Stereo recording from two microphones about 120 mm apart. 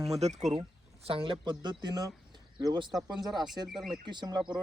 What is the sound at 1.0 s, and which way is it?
Speech, 50° right (ahead or behind).